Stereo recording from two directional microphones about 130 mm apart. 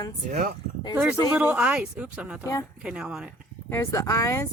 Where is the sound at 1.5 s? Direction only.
5° right (ahead or behind).